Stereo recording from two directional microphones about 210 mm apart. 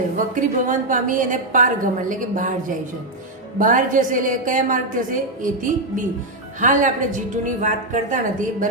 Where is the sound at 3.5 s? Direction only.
40° right (ahead or behind).